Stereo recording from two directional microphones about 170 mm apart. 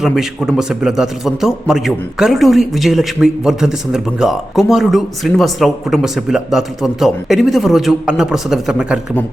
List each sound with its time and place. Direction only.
0.0 s a man's voice: centre (ahead or behind)